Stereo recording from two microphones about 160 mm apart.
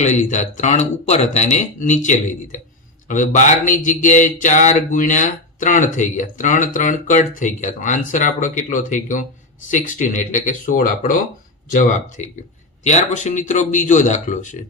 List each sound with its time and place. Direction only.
0.0 s a man's voice: 50° left (ahead or behind)